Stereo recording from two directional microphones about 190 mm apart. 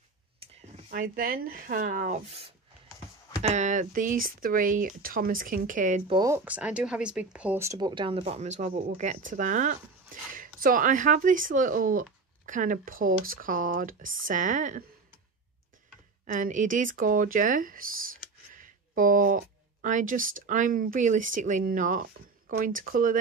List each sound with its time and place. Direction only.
0.4 s a sound: 30° right (ahead or behind)
0.8 s speech: 50° right (ahead or behind)
6.0 s speech: 20° right (ahead or behind); by 14.9 s 40° right (ahead or behind)
16.3 s speech: 40° right (ahead or behind)